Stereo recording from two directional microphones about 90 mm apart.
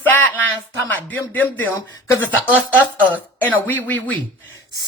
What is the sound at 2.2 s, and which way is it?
Speech, 20° right (ahead or behind).